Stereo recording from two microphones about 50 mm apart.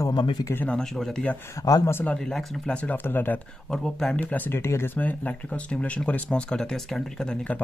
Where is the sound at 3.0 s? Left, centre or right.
Left.